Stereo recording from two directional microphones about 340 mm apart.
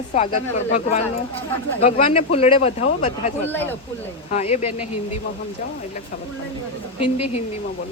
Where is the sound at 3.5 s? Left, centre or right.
Centre.